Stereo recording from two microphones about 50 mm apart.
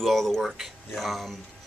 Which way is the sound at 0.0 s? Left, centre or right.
Centre.